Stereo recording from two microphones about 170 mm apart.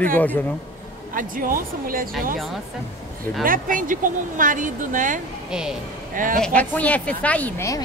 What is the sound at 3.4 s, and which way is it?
Speech, 55° right (ahead or behind).